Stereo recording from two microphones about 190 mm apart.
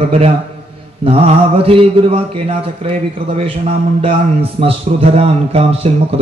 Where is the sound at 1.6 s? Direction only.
30° right (ahead or behind).